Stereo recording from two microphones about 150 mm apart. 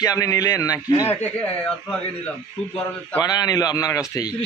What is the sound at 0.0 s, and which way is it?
Speech, 20° left (ahead or behind).